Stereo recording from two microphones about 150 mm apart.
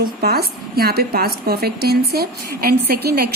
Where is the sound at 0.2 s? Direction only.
90° right.